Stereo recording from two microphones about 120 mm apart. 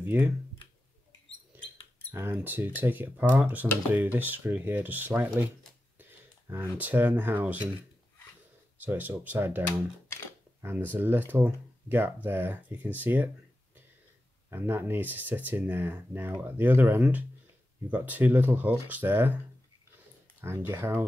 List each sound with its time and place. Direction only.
0.0 s speech: 15° right (ahead or behind)
2.1 s speech: 20° right (ahead or behind)
8.7 s speech: 15° right (ahead or behind)
14.5 s speech: 20° right (ahead or behind)
20.3 s speech: 20° right (ahead or behind)